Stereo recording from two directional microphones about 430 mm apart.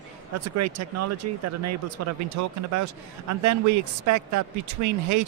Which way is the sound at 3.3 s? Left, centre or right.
Right.